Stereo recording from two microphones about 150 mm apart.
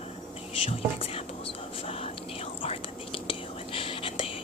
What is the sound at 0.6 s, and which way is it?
Speech, 40° left (ahead or behind).